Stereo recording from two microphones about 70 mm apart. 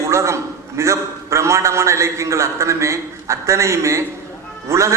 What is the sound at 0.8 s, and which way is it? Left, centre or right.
A man's voice, right.